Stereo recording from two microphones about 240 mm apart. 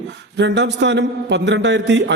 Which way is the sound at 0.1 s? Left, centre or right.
Right.